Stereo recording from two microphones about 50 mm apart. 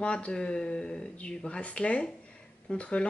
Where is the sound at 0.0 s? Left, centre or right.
Left.